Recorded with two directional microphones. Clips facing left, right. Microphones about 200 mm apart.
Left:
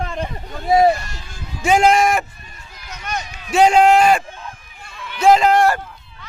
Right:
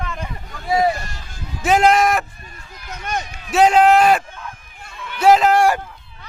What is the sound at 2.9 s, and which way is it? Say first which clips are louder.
Speech: right 2 dB; 50° right (ahead or behind).